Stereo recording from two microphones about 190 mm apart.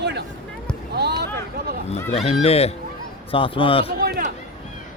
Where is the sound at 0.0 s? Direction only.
60° right (ahead or behind).